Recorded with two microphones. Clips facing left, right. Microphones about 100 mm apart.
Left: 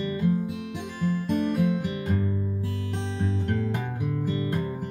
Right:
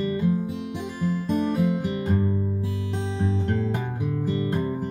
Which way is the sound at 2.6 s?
15° right (ahead or behind).